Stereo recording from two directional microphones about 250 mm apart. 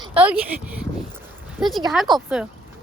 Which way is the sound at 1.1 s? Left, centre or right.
Centre.